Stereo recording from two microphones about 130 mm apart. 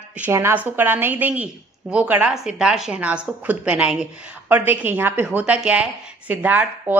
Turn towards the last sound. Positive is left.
turn(degrees=-15)  # may be behind; listen again after turning